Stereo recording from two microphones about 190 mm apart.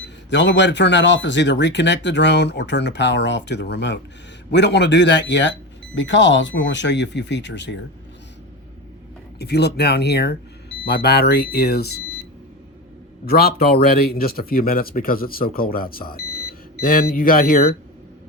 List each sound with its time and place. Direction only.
0.0 s a man's voice: 70° left (ahead or behind)
9.4 s speech: 60° left (ahead or behind)
13.2 s speech: 55° left (ahead or behind)